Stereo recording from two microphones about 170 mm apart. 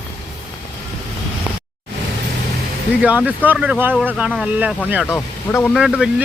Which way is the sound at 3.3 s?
10° right (ahead or behind).